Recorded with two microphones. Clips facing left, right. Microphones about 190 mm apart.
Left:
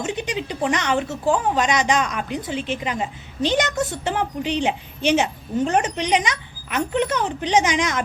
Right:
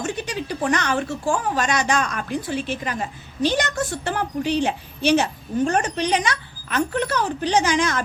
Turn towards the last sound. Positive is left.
turn(degrees=20)  # may be behind; listen again after turning